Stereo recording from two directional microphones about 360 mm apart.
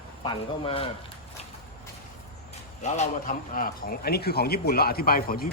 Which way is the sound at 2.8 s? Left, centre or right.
Centre.